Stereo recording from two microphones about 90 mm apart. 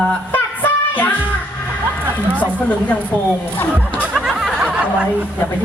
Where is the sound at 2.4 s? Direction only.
20° left (ahead or behind).